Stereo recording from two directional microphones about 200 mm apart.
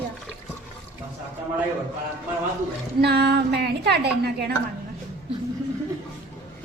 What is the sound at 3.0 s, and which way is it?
A woman's voice, 55° right (ahead or behind).